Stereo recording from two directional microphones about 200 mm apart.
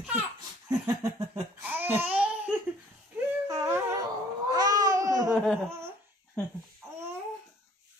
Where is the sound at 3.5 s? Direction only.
15° right (ahead or behind).